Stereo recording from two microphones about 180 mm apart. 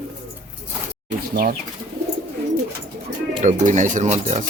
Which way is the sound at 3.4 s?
40° right (ahead or behind).